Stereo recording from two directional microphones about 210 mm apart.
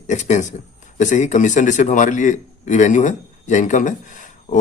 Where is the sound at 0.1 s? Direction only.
35° left (ahead or behind).